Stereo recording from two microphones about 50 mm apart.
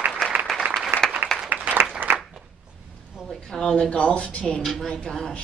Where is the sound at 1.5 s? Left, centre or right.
Right.